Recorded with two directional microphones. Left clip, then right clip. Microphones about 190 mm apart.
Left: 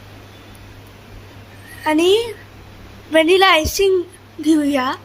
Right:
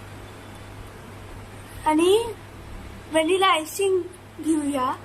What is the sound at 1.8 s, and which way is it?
A woman's voice, 25° left (ahead or behind).